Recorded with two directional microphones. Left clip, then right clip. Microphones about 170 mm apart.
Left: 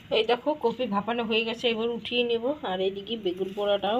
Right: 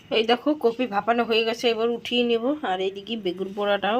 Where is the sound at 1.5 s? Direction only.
15° right (ahead or behind).